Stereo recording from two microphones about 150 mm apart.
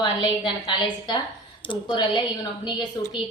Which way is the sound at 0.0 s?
30° left (ahead or behind).